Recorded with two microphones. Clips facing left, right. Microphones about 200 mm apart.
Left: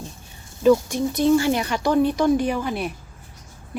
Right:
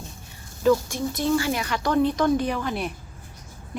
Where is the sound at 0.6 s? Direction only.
15° left (ahead or behind).